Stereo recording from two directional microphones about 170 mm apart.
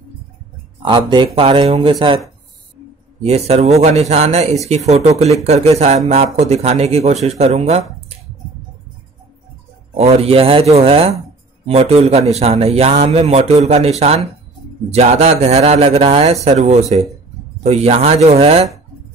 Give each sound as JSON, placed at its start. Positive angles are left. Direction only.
{"t": 0.8, "sound": "a man's voice", "side_deg": -25}
{"t": 3.2, "sound": "a man's voice", "side_deg": -40}
{"t": 9.9, "sound": "a man's voice", "side_deg": -35}